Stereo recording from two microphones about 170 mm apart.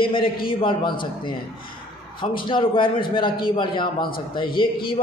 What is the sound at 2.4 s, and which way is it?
A man's voice, 30° left (ahead or behind).